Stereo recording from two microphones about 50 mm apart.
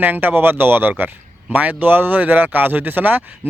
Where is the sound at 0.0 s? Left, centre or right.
Right.